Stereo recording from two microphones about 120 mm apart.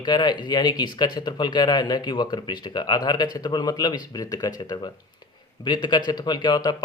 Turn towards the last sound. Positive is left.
turn(degrees=40)  # may be behind; listen again after turning